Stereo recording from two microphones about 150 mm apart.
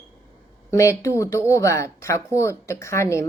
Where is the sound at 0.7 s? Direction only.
20° left (ahead or behind).